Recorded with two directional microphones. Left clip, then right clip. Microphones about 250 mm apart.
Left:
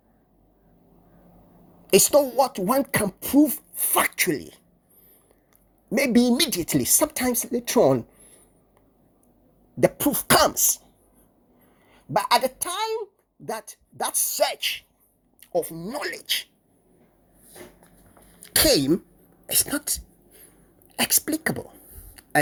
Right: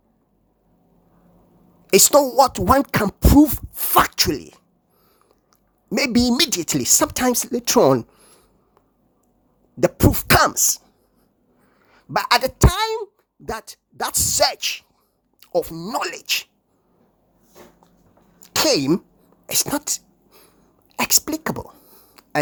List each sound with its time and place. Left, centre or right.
1.9 s speech: right
5.9 s speech: centre
9.8 s cough: right
10.3 s speech: centre
11.9 s a woman's voice: centre
16.0 s speech: centre
18.3 s sneeze: centre
19.5 s a sound: centre
20.9 s whispering: centre